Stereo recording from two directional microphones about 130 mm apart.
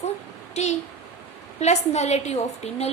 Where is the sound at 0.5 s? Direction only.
60° left (ahead or behind).